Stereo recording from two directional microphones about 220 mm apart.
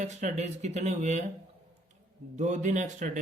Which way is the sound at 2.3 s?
35° right (ahead or behind).